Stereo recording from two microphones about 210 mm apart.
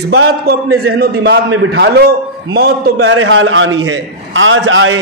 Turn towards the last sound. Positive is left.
turn(degrees=-65)  # may be behind; listen again after turning